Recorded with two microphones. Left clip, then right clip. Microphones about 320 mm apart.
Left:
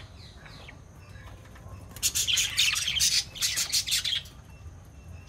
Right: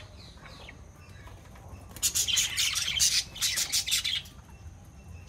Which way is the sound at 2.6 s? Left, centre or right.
Left.